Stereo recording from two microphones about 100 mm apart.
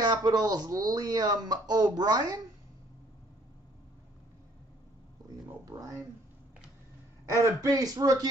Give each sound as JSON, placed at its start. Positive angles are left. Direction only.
{"t": 0.0, "sound": "speech", "side_deg": -45}
{"t": 5.7, "sound": "speech", "side_deg": -35}
{"t": 7.4, "sound": "speech", "side_deg": -35}